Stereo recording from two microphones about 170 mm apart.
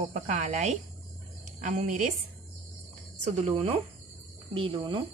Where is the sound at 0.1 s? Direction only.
45° right (ahead or behind).